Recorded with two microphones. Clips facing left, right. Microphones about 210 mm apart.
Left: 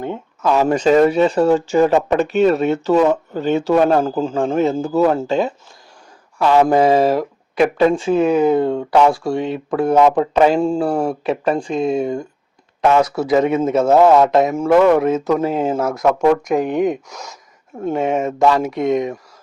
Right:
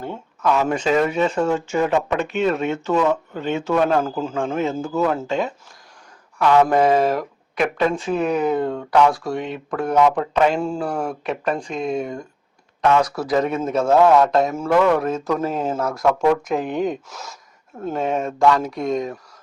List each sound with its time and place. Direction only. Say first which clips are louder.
0.4 s speech: left 5 dB; 35° left (ahead or behind)
14.3 s speech: left 4 dB; centre (ahead or behind)
14.5 s speech: left 5 dB; 20° left (ahead or behind)
16.6 s speech: left 5 dB; 45° left (ahead or behind)
16.8 s speech: left 5 dB; centre (ahead or behind)
18.3 s speech: left 1 dB; 25° left (ahead or behind)